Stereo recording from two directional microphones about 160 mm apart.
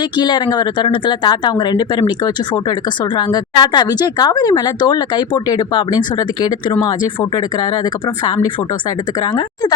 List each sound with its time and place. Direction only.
0.0 s a woman's voice: 25° left (ahead or behind)